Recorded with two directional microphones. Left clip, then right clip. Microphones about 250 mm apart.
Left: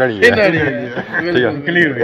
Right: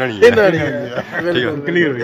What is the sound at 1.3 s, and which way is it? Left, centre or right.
Speech, centre.